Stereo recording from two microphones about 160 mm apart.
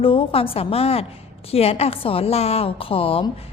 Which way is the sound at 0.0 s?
35° left (ahead or behind).